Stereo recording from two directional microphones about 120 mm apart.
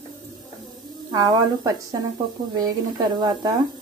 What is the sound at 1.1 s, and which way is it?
Speech, 30° right (ahead or behind).